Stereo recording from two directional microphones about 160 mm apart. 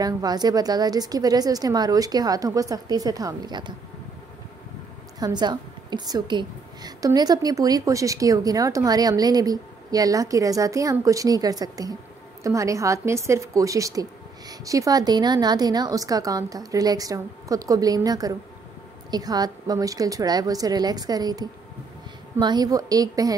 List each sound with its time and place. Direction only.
0.0 s a woman's voice: 25° right (ahead or behind)
5.2 s a woman's voice: 25° right (ahead or behind)